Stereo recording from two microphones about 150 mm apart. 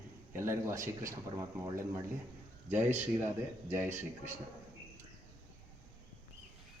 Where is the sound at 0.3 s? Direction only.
20° right (ahead or behind).